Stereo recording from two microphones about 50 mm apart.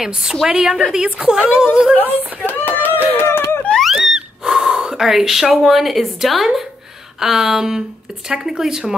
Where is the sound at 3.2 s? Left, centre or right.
Left.